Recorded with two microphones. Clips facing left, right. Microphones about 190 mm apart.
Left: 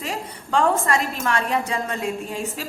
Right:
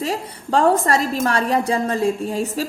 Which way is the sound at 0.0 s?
35° right (ahead or behind).